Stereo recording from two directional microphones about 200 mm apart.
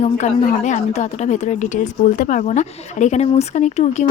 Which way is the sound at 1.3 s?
35° left (ahead or behind).